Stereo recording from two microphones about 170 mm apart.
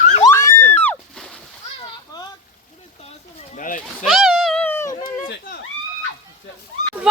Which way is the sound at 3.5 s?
50° left (ahead or behind).